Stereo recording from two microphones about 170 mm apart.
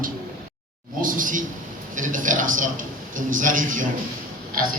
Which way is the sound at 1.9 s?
50° right (ahead or behind).